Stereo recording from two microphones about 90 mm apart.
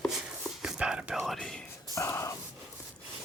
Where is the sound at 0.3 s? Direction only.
5° right (ahead or behind).